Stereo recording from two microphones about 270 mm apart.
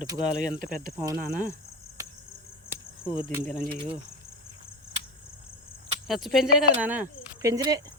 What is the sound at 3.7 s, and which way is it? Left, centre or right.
Cricket, centre.